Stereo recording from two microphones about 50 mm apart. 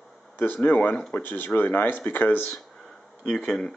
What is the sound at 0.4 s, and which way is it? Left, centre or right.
Speech, left.